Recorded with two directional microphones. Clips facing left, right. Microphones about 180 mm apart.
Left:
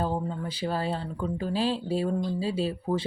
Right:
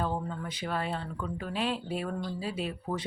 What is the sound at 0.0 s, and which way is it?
Speech, 30° left (ahead or behind).